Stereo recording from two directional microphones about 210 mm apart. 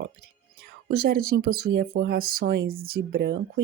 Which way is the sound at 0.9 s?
45° right (ahead or behind).